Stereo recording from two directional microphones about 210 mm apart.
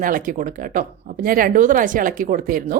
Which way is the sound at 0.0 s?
40° right (ahead or behind).